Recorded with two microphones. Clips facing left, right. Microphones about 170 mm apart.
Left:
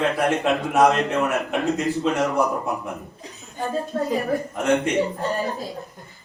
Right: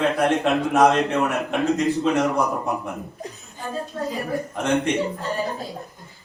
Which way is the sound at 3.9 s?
55° left (ahead or behind).